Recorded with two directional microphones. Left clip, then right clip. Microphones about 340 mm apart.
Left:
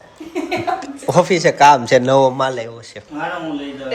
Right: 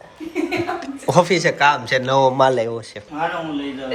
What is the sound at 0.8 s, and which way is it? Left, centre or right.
A man's voice, centre.